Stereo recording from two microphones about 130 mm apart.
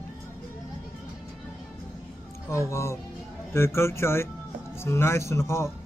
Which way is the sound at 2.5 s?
20° left (ahead or behind).